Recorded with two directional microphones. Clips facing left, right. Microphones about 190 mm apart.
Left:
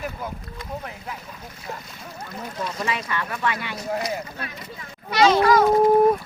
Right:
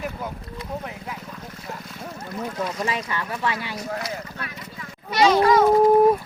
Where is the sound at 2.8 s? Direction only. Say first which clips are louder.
Even; 35° right (ahead or behind).